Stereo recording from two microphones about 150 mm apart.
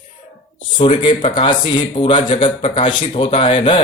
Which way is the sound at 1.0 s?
35° left (ahead or behind).